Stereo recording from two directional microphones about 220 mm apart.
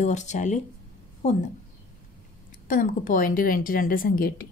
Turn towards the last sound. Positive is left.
turn(degrees=40)  # may be behind; listen again after turning